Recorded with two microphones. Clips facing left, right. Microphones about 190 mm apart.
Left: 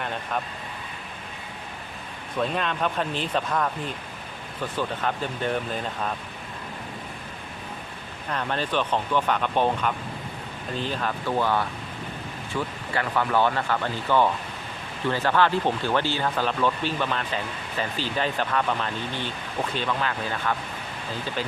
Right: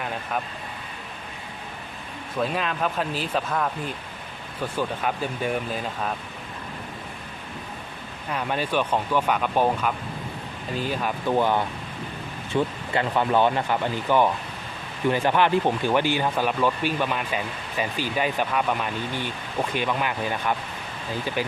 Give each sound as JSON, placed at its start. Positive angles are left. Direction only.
{"t": 2.4, "sound": "speech", "side_deg": -5}
{"t": 4.8, "sound": "speech", "side_deg": -10}
{"t": 8.3, "sound": "speech", "side_deg": -10}